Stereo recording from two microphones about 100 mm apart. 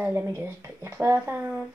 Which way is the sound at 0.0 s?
25° right (ahead or behind).